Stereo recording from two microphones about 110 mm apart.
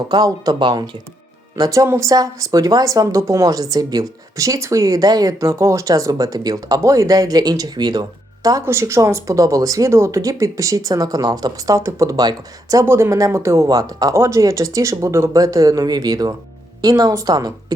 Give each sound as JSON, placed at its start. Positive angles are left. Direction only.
{"t": 0.1, "sound": "speech", "side_deg": -35}
{"t": 8.4, "sound": "speech", "side_deg": -30}
{"t": 12.8, "sound": "speech", "side_deg": -25}